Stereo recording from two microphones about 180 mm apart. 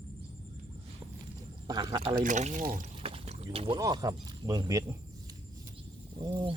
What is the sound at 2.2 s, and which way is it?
Speech, 45° right (ahead or behind).